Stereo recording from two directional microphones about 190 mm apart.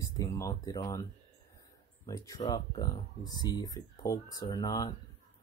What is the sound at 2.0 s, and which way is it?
Speech, 20° left (ahead or behind).